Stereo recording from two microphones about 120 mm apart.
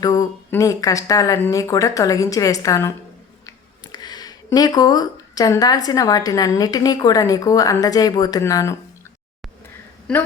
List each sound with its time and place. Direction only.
0.0 s a woman's voice: 30° left (ahead or behind)
3.9 s a woman's voice: 35° left (ahead or behind)